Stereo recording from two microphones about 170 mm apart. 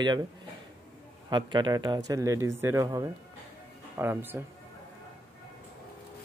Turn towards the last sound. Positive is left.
turn(degrees=-10)  # may be behind; listen again after turning